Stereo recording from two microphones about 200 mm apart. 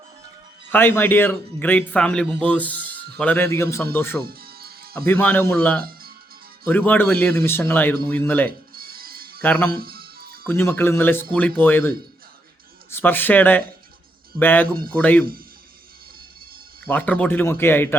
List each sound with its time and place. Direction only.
0.7 s a man's voice: 10° left (ahead or behind)
4.2 s music: 50° right (ahead or behind)
5.0 s a man's voice: 10° left (ahead or behind)
5.8 s music: 50° right (ahead or behind)
6.7 s a man's voice: 10° left (ahead or behind)
8.4 s music: 50° right (ahead or behind)
9.4 s a man's voice: 10° left (ahead or behind)
9.7 s music: 50° right (ahead or behind)
10.4 s a man's voice: 10° left (ahead or behind)
16.8 s a man's voice: 10° left (ahead or behind)